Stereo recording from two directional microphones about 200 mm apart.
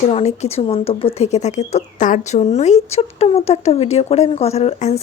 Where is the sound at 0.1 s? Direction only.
30° left (ahead or behind).